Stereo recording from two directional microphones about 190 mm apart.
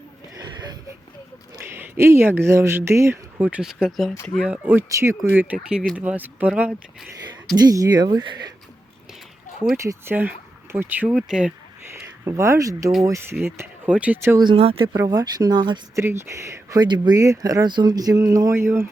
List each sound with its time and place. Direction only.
0.3 s a sound: 20° right (ahead or behind)
1.6 s speech: 10° right (ahead or behind)
7.5 s speech: 20° right (ahead or behind)
9.7 s speech: 15° right (ahead or behind)
12.2 s speech: 15° right (ahead or behind)
14.5 s speech: 30° right (ahead or behind)
14.9 s speech: 20° right (ahead or behind)